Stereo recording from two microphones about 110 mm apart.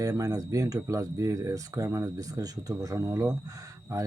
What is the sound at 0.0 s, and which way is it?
Speech, 30° right (ahead or behind).